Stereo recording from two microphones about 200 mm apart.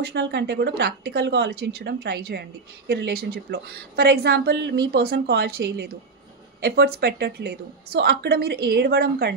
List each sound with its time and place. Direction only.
0.0 s a woman's voice: 60° right (ahead or behind)